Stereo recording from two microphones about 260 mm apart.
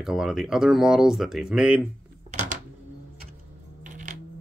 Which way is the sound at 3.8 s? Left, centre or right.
Right.